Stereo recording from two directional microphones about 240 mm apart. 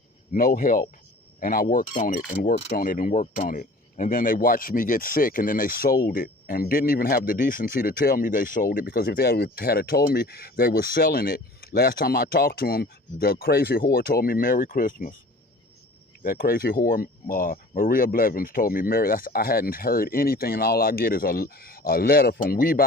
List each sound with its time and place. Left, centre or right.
0.3 s speech: left
16.2 s speech: left